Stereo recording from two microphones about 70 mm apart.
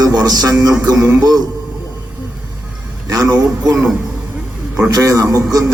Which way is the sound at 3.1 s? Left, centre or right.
Right.